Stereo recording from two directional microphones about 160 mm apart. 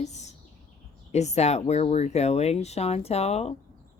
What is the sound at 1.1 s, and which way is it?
Speech, 45° left (ahead or behind).